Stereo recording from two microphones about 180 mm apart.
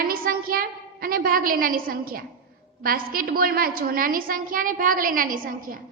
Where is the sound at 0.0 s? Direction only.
55° right (ahead or behind).